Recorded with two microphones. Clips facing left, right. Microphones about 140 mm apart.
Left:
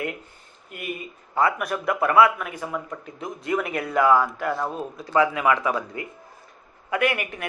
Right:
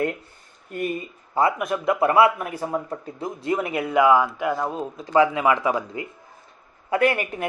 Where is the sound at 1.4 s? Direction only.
25° right (ahead or behind).